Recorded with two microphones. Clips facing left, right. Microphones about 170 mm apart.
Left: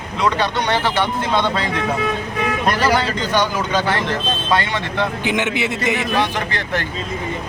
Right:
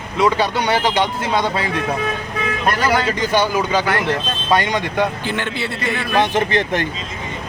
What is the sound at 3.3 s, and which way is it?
Speech, 10° right (ahead or behind).